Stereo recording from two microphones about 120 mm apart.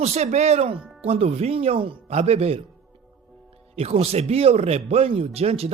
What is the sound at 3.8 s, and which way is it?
Speech, 60° right (ahead or behind).